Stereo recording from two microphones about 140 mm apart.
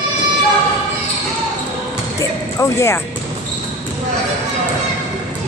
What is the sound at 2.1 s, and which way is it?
Music, 20° left (ahead or behind).